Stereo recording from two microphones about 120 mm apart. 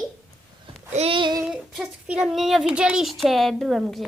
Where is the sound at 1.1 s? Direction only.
40° right (ahead or behind).